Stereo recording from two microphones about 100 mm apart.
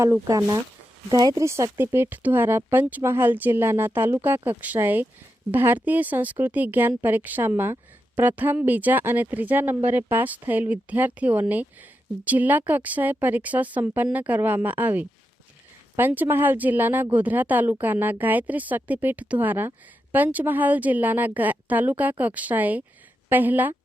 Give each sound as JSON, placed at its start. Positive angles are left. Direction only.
{"t": 0.0, "sound": "a woman's voice", "side_deg": -30}